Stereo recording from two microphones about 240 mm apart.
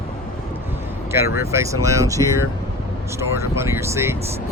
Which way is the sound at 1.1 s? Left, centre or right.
Centre.